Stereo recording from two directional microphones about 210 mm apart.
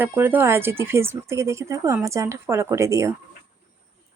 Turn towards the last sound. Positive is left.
turn(degrees=-15)  # may be behind; listen again after turning